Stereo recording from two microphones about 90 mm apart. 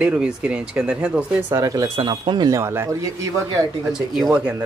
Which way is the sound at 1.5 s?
40° right (ahead or behind).